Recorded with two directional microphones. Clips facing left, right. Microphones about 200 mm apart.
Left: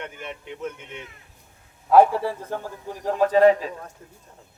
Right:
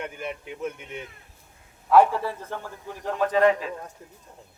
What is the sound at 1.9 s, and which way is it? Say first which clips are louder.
A man's voice: left 2 dB; 35° left (ahead or behind).